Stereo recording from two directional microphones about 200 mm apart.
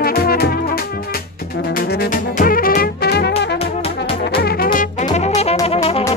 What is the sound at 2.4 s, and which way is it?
Music, 45° left (ahead or behind).